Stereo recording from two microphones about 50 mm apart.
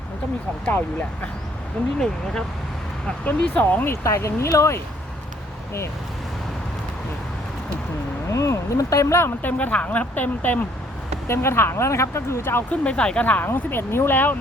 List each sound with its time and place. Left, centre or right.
0.7 s speech: left
1.8 s speech: centre
3.2 s speech: left
3.8 s speech: left
8.3 s speech: left
9.4 s speech: left
11.3 s speech: left
12.7 s speech: left
13.4 s speech: left